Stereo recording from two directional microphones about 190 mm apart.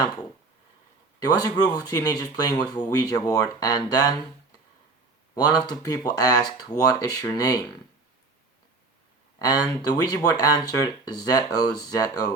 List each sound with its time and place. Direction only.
1.2 s speech: 20° left (ahead or behind)
5.3 s speech: 20° left (ahead or behind)
9.9 s speech: 20° left (ahead or behind)